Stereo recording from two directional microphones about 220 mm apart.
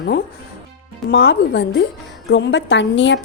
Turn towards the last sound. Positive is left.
turn(degrees=55)  # may be behind; listen again after turning